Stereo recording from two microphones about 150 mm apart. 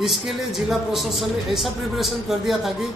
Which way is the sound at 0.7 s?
Centre (ahead or behind).